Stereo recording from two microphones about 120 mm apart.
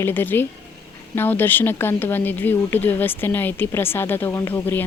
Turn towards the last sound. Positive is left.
turn(degrees=15)  # may be behind; listen again after turning